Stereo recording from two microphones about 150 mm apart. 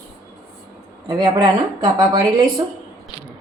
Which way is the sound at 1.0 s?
30° right (ahead or behind).